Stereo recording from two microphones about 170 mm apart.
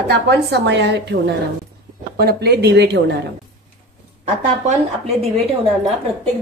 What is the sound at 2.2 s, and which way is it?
Speech, 70° right (ahead or behind).